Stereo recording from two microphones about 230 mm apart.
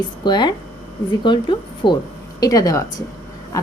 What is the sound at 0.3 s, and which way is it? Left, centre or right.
A woman's voice, centre.